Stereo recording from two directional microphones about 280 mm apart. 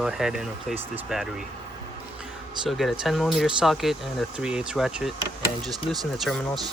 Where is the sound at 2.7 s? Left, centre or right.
Centre.